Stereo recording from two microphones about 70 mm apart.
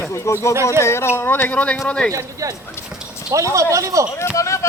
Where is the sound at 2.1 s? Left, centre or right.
Right.